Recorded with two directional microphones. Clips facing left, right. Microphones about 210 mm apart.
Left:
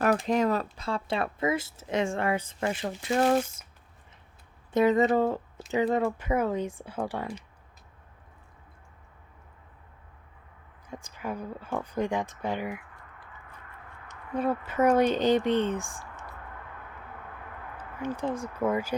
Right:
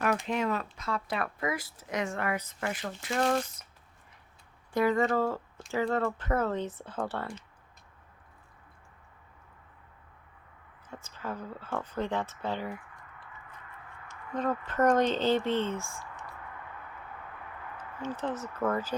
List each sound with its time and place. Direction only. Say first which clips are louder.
0.0 s speech: left 5 dB; 35° left (ahead or behind)
4.7 s speech: left 4 dB; 20° left (ahead or behind)
10.8 s speech: left 3 dB; 15° left (ahead or behind)
14.1 s speech: left 3 dB; 10° left (ahead or behind)
18.0 s speech: left 3 dB; 10° left (ahead or behind)